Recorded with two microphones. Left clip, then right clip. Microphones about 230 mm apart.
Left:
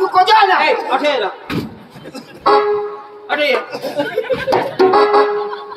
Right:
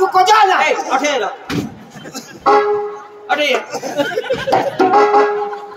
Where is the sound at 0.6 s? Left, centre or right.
Centre.